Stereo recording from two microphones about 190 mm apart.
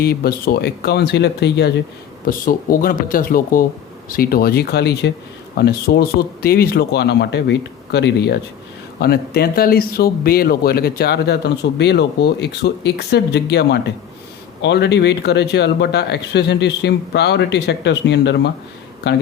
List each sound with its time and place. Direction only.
0.0 s speech: 55° left (ahead or behind)
2.2 s speech: 50° left (ahead or behind)